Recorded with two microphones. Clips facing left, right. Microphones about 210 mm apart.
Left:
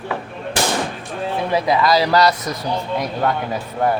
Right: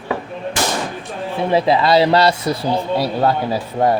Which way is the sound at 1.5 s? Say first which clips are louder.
Right 3 dB; 30° right (ahead or behind).